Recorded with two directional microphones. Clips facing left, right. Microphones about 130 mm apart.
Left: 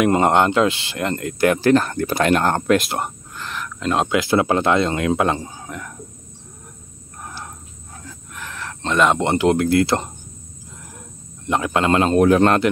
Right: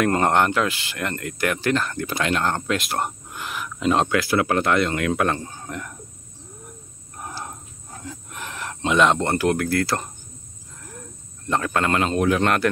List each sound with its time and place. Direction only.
0.0 s speech: 20° left (ahead or behind); by 2.8 s 55° left (ahead or behind)
3.3 s speech: 10° right (ahead or behind)
4.1 s speech: 20° left (ahead or behind)
5.4 s speech: 5° left (ahead or behind)
7.2 s wild animals: 15° right (ahead or behind)
8.3 s a sound: 15° right (ahead or behind)
8.9 s speech: centre (ahead or behind)
9.2 s speech: 20° left (ahead or behind)
11.4 s speech: 15° left (ahead or behind)
12.1 s speech: 40° left (ahead or behind)